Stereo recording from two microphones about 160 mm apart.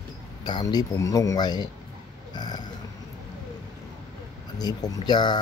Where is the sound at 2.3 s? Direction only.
25° left (ahead or behind).